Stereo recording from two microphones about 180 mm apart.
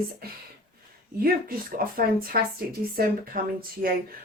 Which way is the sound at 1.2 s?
55° right (ahead or behind).